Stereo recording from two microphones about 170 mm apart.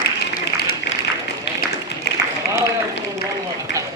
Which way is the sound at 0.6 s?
70° left (ahead or behind).